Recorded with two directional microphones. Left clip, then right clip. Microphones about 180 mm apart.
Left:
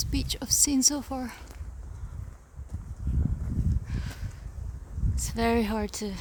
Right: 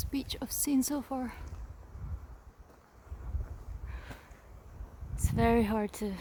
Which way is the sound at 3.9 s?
Centre (ahead or behind).